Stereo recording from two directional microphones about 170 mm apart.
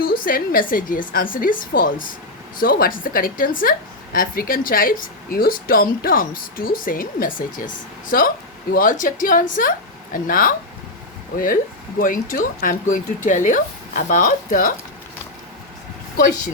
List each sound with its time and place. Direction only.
0.0 s a woman's voice: 55° left (ahead or behind)